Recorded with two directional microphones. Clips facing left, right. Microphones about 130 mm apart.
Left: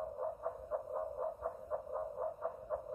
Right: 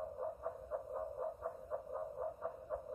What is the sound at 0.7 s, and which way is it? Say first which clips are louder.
Frog: left 3 dB; 25° left (ahead or behind).